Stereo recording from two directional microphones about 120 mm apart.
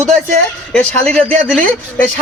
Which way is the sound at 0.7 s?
10° left (ahead or behind).